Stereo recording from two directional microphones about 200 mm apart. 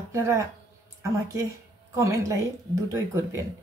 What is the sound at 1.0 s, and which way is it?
Speech, 15° right (ahead or behind).